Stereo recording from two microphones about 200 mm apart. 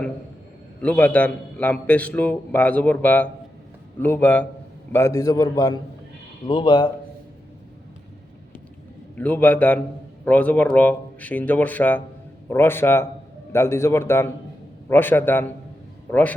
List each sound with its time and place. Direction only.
0.8 s a man's voice: 5° left (ahead or behind)
9.1 s a man's voice: 10° left (ahead or behind)